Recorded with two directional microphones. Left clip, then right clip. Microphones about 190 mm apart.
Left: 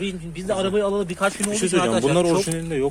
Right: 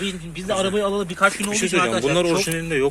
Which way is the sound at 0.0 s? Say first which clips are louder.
Right 1 dB; 10° left (ahead or behind).